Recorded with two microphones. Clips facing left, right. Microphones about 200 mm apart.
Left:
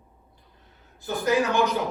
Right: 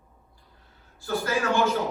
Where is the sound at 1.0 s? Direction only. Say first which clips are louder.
Left 3 dB; 20° left (ahead or behind).